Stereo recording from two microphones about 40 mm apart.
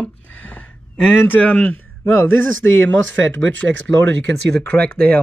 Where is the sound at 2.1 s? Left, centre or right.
Left.